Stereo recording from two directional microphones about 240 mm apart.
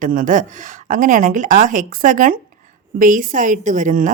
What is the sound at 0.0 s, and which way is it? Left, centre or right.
A woman's voice, right.